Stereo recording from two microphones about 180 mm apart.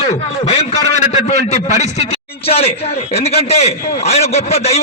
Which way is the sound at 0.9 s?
40° left (ahead or behind).